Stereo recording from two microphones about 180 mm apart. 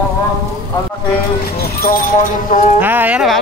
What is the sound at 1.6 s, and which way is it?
Clip-clop, 55° left (ahead or behind).